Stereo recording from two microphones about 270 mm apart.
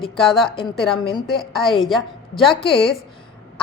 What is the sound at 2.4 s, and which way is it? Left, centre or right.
Speech, centre.